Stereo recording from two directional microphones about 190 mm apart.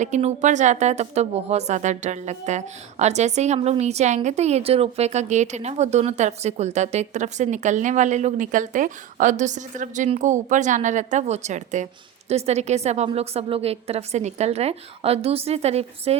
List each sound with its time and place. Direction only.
0.0 s a woman's voice: 35° right (ahead or behind)